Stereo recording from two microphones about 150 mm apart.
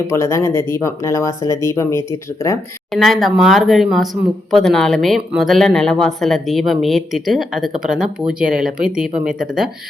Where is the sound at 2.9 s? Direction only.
Centre (ahead or behind).